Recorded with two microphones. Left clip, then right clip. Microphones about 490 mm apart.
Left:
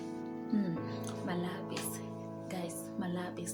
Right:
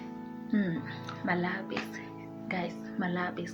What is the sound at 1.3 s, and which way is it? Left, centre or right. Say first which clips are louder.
Speech: right 9 dB; left.